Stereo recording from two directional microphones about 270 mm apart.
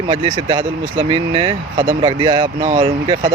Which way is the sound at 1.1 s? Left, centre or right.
Centre.